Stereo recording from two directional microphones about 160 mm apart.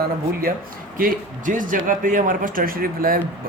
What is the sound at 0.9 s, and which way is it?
Speech, 60° right (ahead or behind).